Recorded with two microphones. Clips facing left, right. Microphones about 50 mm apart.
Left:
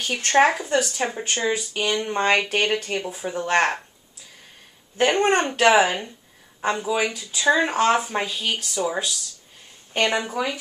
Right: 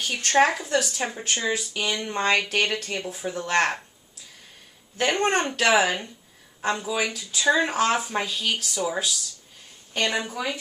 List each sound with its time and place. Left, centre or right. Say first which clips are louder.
0.1 s speech: left 3 dB; centre
4.9 s speech: left 4 dB; centre
9.9 s speech: left 4 dB; centre